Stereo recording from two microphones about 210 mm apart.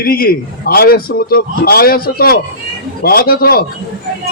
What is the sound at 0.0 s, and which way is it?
A man's voice, 45° left (ahead or behind).